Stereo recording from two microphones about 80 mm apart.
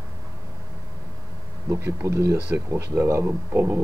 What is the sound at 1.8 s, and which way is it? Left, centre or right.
Speech, right.